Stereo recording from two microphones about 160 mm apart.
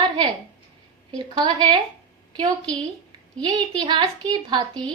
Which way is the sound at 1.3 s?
30° right (ahead or behind).